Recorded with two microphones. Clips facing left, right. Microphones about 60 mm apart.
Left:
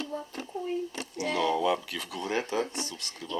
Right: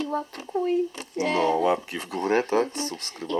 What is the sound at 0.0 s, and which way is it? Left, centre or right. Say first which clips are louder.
Speech: right 7 dB; right.